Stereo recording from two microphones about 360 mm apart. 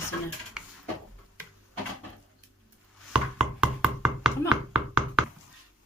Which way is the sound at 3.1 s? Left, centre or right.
Centre.